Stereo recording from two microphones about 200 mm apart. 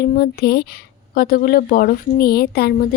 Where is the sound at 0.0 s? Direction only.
50° left (ahead or behind).